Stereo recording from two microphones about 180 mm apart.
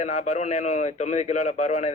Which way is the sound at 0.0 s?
40° left (ahead or behind).